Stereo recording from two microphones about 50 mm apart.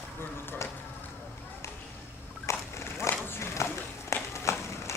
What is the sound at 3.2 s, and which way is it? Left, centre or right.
Run, left.